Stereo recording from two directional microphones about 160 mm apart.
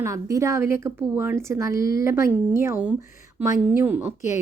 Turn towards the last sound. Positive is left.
turn(degrees=-15)  # may be behind; listen again after turning